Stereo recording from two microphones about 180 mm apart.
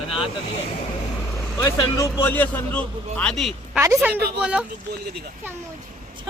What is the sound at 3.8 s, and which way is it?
Speech, 15° right (ahead or behind).